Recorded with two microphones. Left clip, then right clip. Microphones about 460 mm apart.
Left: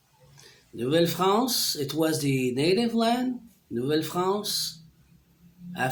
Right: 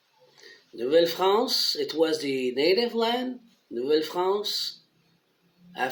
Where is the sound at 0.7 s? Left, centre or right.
Left.